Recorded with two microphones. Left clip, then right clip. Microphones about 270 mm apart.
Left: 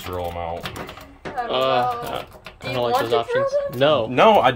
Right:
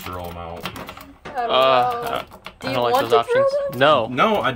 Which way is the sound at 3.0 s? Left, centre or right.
Centre.